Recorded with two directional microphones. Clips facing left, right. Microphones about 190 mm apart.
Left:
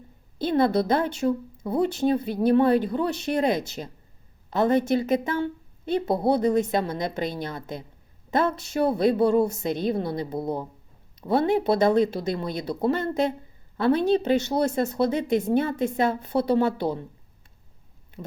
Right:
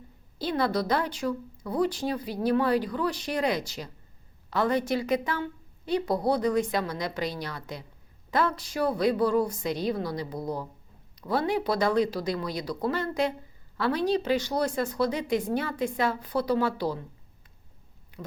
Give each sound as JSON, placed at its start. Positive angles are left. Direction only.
{"t": 0.3, "sound": "speech", "side_deg": 25}